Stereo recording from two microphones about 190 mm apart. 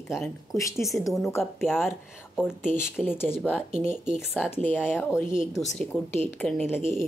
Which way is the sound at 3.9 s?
5° right (ahead or behind).